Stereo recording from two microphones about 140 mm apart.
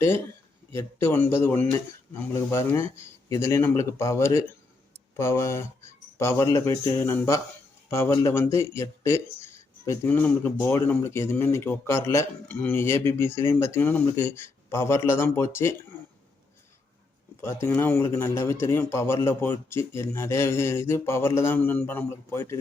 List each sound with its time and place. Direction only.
0.7 s a man's voice: 20° left (ahead or behind)
17.4 s a man's voice: 15° left (ahead or behind)